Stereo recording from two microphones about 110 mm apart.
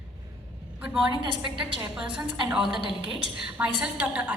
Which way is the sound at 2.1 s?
5° right (ahead or behind).